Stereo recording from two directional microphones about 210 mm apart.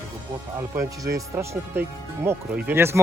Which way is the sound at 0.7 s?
15° right (ahead or behind).